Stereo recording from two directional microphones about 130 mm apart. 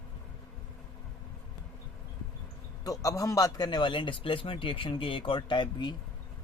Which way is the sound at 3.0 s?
25° left (ahead or behind).